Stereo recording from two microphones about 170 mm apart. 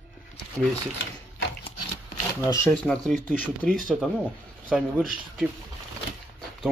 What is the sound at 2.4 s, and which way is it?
Speech, 15° left (ahead or behind).